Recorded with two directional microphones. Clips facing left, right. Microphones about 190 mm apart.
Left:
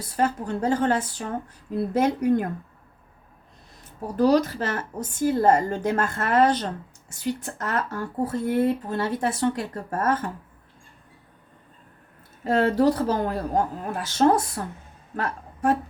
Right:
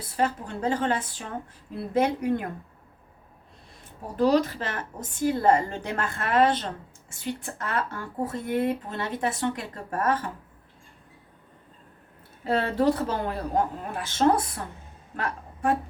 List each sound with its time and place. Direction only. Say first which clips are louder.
0.0 s a woman's voice: left 2 dB; 45° left (ahead or behind)
4.2 s a woman's voice: left 2 dB; 40° left (ahead or behind)
12.5 s a woman's voice: left 3 dB; 45° left (ahead or behind)
15.1 s a sound: left 2 dB; 40° left (ahead or behind)